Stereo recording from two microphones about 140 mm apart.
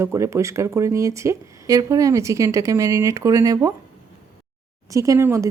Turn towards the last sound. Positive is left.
turn(degrees=-20)  # may be behind; listen again after turning